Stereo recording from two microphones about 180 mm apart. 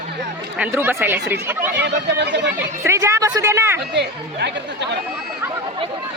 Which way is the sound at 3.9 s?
70° right (ahead or behind).